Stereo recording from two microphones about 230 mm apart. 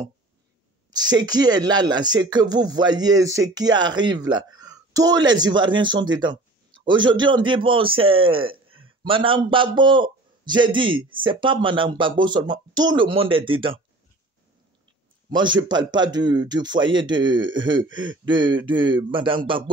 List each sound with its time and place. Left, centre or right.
0.9 s speech: centre
15.3 s speech: centre